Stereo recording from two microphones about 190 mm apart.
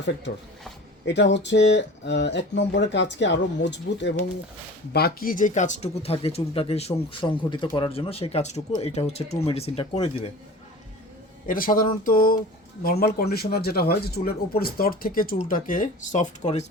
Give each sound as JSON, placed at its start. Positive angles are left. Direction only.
{"t": 1.0, "sound": "speech", "side_deg": 65}
{"t": 11.4, "sound": "speech", "side_deg": 45}